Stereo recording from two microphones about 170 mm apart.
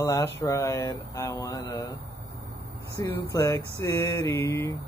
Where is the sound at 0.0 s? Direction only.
15° left (ahead or behind).